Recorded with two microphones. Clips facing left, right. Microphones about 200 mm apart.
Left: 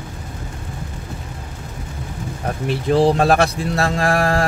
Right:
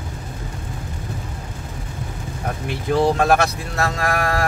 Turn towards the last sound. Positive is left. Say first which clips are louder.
# left 4 dB
turn(degrees=30)  # may be behind; listen again after turning